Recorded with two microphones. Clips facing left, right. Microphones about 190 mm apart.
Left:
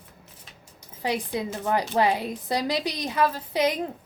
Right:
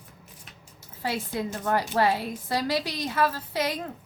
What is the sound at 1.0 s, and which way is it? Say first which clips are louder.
A woman's voice: left 2 dB; 15° left (ahead or behind).